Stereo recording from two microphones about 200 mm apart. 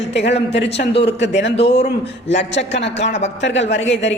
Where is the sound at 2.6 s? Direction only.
60° left (ahead or behind).